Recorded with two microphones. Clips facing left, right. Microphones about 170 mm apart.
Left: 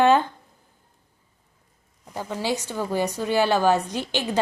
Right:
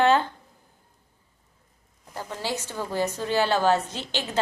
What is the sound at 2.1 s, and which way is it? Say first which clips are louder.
A woman's voice: left 4 dB; 15° left (ahead or behind).